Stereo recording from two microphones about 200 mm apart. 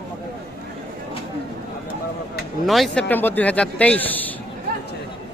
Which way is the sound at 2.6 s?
Centre (ahead or behind).